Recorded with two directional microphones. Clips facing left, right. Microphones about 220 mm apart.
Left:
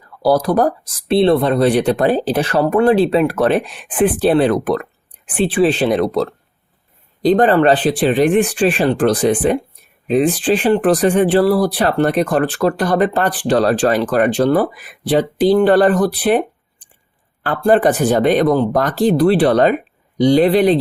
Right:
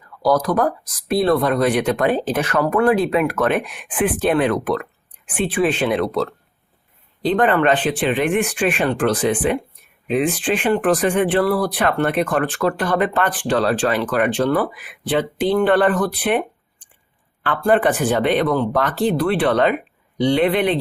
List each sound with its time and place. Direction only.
0.2 s speech: 30° left (ahead or behind)
7.3 s speech: 35° left (ahead or behind)